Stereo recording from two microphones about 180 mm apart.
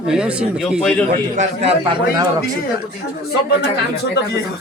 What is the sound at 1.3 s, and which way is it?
Speech, 35° right (ahead or behind).